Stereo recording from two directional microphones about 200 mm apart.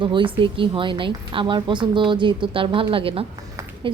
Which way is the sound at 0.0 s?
25° right (ahead or behind).